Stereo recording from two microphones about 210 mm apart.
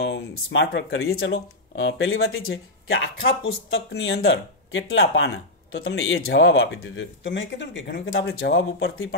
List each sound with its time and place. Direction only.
0.0 s speech: 60° left (ahead or behind)
3.7 s speech: 60° left (ahead or behind)